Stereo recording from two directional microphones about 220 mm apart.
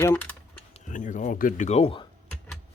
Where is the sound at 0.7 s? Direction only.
35° left (ahead or behind).